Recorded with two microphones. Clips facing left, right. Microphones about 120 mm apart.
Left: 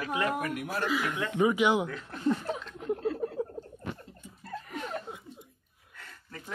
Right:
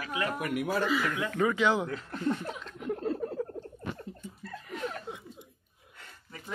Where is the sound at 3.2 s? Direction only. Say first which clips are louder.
Left 1 dB; 20° left (ahead or behind).